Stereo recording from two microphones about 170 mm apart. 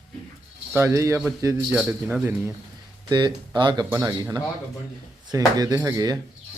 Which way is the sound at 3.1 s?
25° right (ahead or behind).